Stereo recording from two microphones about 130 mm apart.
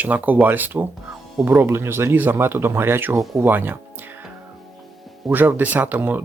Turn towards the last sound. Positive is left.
turn(degrees=-15)  # may be behind; listen again after turning